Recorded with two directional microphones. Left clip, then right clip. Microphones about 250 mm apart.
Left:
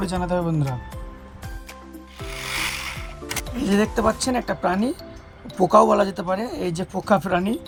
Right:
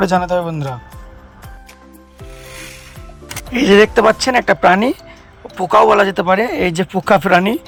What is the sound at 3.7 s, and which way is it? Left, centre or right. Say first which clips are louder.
Speech: right 12 dB; right.